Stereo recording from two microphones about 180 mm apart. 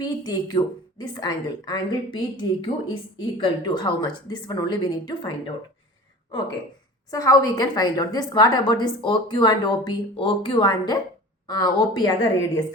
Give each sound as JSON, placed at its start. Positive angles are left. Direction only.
{"t": 0.0, "sound": "a woman's voice", "side_deg": 25}
{"t": 7.1, "sound": "a woman's voice", "side_deg": 20}